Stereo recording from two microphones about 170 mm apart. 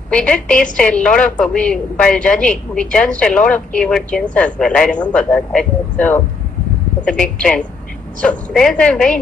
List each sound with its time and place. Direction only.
0.1 s a woman's voice: 5° left (ahead or behind)